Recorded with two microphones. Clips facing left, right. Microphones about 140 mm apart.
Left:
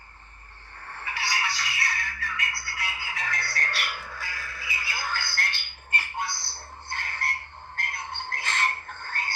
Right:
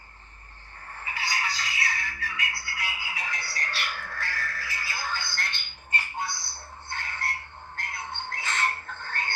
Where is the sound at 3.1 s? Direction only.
5° right (ahead or behind).